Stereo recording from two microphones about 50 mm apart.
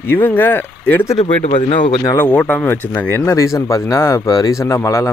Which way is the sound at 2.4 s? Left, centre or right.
Left.